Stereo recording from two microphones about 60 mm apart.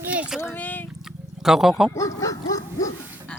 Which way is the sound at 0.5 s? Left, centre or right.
Left.